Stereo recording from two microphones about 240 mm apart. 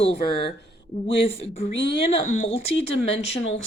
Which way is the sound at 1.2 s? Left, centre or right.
Left.